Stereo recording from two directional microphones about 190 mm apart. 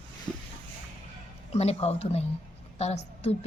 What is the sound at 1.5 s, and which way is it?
A woman's voice, 35° left (ahead or behind).